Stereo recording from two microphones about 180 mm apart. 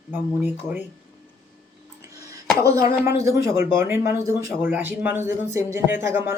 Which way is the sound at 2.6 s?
20° right (ahead or behind).